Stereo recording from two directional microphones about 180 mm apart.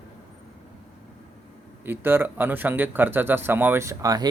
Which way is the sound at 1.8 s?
10° right (ahead or behind).